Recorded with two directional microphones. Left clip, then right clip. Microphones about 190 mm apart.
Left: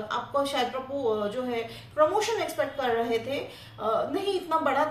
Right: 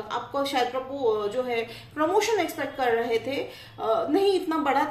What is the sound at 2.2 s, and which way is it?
A woman's voice, 40° right (ahead or behind).